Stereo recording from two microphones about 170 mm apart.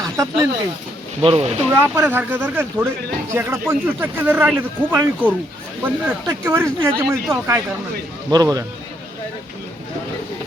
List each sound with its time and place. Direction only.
0.0 s snake: 20° right (ahead or behind)
1.2 s speech: 35° right (ahead or behind)
1.7 s speech: 10° right (ahead or behind)